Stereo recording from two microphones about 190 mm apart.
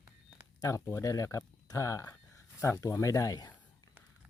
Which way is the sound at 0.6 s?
15° left (ahead or behind).